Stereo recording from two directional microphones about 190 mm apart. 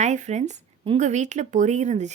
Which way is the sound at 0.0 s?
40° right (ahead or behind).